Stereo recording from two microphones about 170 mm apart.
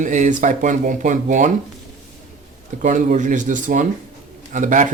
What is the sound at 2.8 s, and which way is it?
Speech, 45° right (ahead or behind).